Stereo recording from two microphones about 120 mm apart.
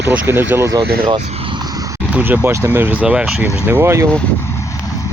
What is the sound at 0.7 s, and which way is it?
Speech, 35° right (ahead or behind).